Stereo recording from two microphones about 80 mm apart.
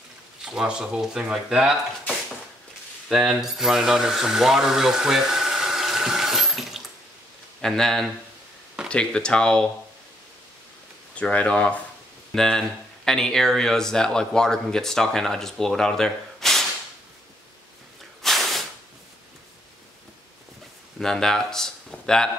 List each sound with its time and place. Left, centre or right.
0.5 s speech: centre
3.1 s speech: centre
11.1 s speech: centre
18.2 s snort: centre
21.0 s speech: centre